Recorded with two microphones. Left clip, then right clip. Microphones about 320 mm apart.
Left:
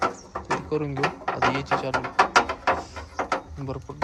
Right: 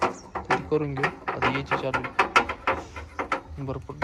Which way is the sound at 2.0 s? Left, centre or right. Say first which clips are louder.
Left 3 dB; left.